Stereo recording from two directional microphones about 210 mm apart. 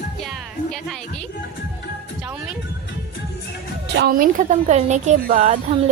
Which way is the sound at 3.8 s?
50° right (ahead or behind).